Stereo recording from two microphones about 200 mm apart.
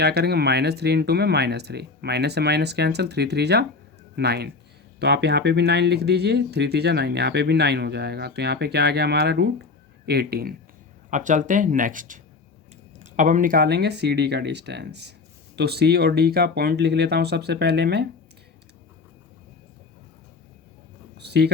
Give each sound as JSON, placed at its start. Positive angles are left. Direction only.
{"t": 0.0, "sound": "speech", "side_deg": -55}
{"t": 11.1, "sound": "speech", "side_deg": -40}
{"t": 21.2, "sound": "a sound", "side_deg": -55}